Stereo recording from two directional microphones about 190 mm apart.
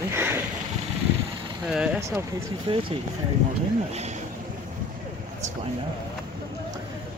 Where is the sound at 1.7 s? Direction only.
5° right (ahead or behind).